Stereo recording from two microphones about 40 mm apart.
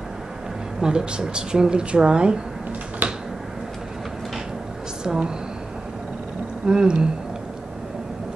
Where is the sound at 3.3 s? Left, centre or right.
Centre.